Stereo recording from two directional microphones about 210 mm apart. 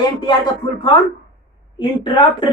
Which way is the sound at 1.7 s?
20° left (ahead or behind).